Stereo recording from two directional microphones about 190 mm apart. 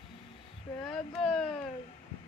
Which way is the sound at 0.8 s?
Centre (ahead or behind).